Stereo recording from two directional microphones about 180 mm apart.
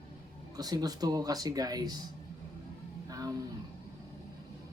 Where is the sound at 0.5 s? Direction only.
20° right (ahead or behind).